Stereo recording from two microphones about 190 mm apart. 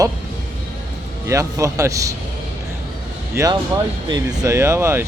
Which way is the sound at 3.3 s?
15° right (ahead or behind).